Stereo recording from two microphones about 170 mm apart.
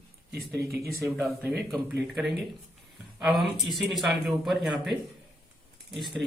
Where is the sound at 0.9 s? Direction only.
15° right (ahead or behind).